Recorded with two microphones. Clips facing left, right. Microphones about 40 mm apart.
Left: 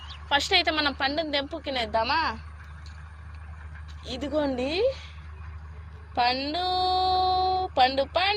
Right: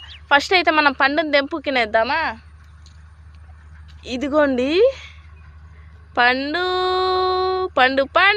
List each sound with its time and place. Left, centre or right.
0.3 s speech: right
2.0 s speech: right
4.0 s a woman's voice: right
6.2 s a woman's voice: right
6.5 s a sound: right